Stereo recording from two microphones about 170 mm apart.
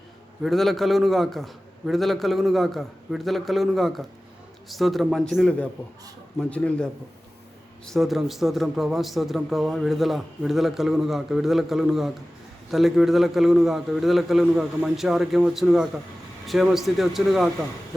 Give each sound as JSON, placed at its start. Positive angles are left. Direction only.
{"t": 0.4, "sound": "a man's voice", "side_deg": 0}